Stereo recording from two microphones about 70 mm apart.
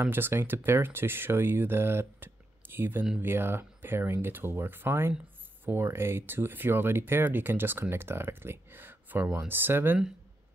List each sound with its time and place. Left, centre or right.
0.0 s speech: right